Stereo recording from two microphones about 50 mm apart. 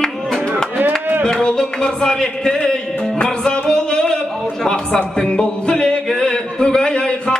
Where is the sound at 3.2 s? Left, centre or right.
Centre.